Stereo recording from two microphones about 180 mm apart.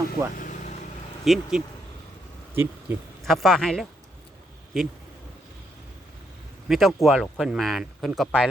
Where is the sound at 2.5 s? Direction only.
15° right (ahead or behind).